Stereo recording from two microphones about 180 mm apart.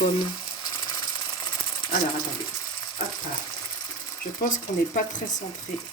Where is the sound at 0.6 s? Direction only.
25° left (ahead or behind).